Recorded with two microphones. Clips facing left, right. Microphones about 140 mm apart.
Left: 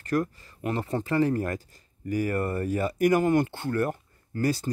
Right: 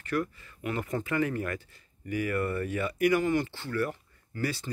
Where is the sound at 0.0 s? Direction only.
40° left (ahead or behind).